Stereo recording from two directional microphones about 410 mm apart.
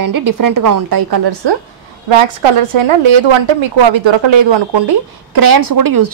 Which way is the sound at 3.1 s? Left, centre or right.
Right.